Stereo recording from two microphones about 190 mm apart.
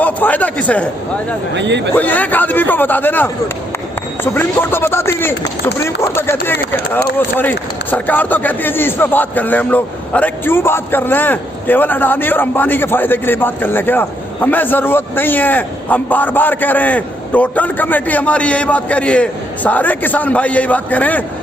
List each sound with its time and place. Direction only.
0.0 s a man's voice: 10° left (ahead or behind)
1.5 s speech: 70° right (ahead or behind)
2.0 s speech: 10° left (ahead or behind)